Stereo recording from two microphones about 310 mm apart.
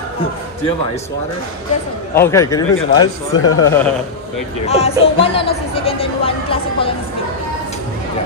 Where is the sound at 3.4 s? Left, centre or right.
Left.